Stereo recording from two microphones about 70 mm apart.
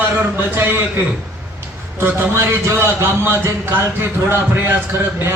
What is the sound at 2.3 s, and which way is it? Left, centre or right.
A man's voice, right.